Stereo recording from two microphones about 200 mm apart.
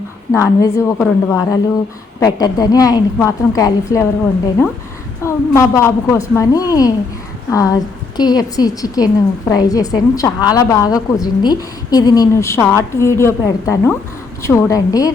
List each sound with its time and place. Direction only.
0.3 s a woman's voice: 15° left (ahead or behind)
5.2 s a woman's voice: 15° left (ahead or behind)